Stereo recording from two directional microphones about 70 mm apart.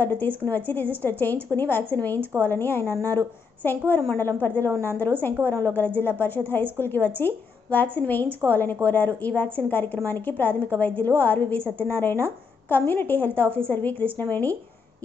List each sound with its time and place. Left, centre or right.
0.0 s a woman's voice: left